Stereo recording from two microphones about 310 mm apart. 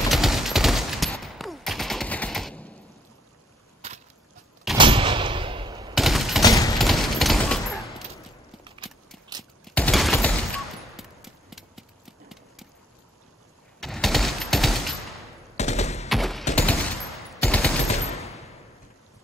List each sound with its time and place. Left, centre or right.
0.1 s fusillade: centre
3.8 s a sound: right
4.7 s gunshot: centre
5.9 s fusillade: centre
8.6 s clip-clop: centre
9.4 s fusillade: centre
11.0 s a sound: centre
13.7 s fusillade: centre
15.5 s machine gun: left
16.1 s fusillade: centre
16.5 s machine gun: centre
17.8 s machine gun: centre